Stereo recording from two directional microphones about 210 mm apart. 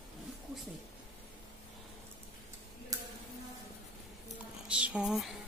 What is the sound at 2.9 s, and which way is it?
Tick-tock, 15° right (ahead or behind).